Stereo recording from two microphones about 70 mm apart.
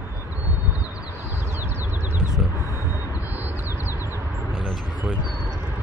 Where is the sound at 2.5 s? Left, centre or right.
Left.